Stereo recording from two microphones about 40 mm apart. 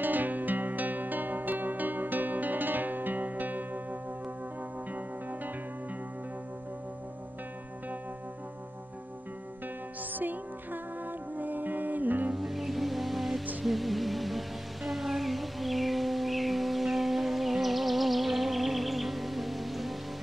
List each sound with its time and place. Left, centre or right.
0.0 s music: right
10.1 s music: right
12.4 s music: centre